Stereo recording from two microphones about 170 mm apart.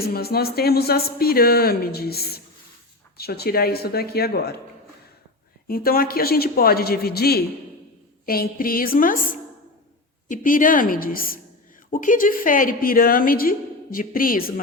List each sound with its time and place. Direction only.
0.0 s a woman's voice: 65° left (ahead or behind)
5.6 s a woman's voice: 60° left (ahead or behind)